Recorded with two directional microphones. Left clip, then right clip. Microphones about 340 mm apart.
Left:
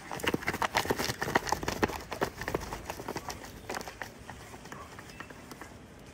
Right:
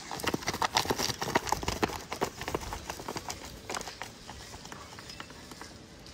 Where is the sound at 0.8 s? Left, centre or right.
Centre.